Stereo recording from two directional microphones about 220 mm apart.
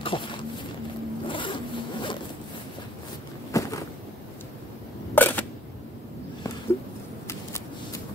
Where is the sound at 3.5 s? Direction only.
15° left (ahead or behind).